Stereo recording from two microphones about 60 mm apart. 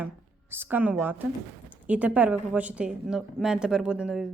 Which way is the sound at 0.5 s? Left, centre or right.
Right.